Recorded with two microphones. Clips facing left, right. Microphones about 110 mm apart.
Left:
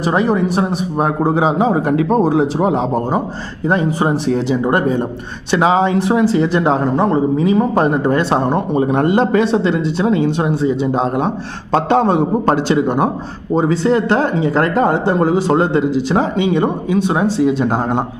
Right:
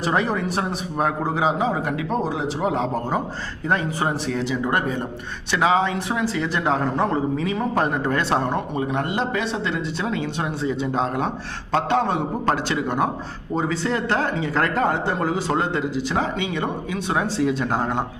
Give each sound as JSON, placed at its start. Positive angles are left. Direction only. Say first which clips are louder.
{"t": 0.0, "sound": "speech", "louder": "left 7 dB", "side_deg": 20}
{"t": 1.2, "sound": "a man's voice", "louder": "left 10 dB", "side_deg": 30}
{"t": 2.6, "sound": "speech", "louder": "left 6 dB", "side_deg": 20}
{"t": 8.4, "sound": "a man's voice", "louder": "left 9 dB", "side_deg": 35}
{"t": 9.8, "sound": "speech", "louder": "left 10 dB", "side_deg": 25}
{"t": 11.7, "sound": "a man's voice", "louder": "left 7 dB", "side_deg": 30}